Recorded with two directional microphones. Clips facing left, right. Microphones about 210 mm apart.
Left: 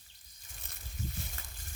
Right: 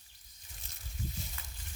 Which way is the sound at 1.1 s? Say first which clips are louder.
Left 1 dB; 55° left (ahead or behind).